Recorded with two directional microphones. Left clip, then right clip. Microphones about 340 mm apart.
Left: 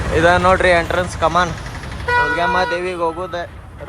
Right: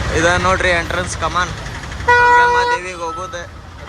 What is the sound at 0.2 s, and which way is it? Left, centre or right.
Speech, centre.